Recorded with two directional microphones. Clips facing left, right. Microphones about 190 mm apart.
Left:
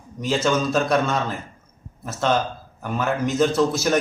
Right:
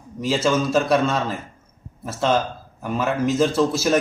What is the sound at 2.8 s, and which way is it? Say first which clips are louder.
Speech: right 2 dB; centre (ahead or behind).